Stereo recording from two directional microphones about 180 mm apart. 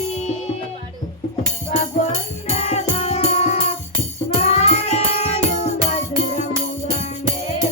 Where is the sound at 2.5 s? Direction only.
35° left (ahead or behind).